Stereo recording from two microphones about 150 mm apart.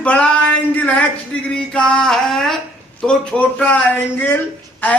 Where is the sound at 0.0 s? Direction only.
10° left (ahead or behind).